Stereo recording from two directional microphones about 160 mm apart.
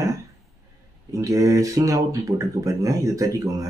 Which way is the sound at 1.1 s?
20° right (ahead or behind).